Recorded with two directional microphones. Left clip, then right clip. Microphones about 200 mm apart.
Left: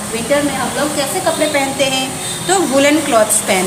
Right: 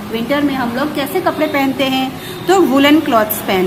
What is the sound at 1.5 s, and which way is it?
Speech, 20° right (ahead or behind).